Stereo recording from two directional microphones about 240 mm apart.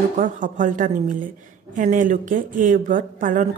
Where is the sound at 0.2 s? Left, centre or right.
Right.